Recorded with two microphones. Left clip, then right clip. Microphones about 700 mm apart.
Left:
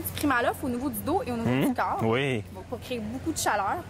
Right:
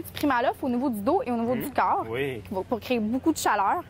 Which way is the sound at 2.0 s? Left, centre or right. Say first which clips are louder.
Left 4 dB; left.